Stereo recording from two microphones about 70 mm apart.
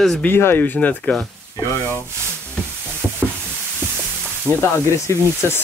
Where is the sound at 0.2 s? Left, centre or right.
Left.